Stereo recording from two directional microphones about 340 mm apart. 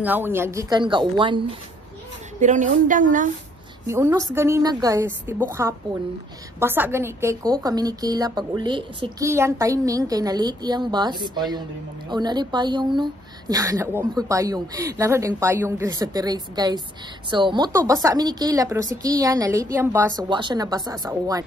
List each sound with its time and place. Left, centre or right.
0.0 s a woman's voice: centre; by 3.3 s right
3.8 s a woman's voice: centre